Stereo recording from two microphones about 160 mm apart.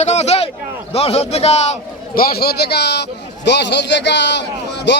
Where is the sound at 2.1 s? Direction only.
85° left.